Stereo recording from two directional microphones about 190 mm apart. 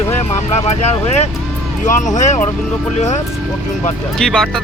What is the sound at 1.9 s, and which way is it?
Speech, 40° left (ahead or behind).